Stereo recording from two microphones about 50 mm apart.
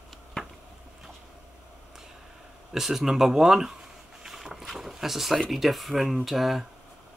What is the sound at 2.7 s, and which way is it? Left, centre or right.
Speech, centre.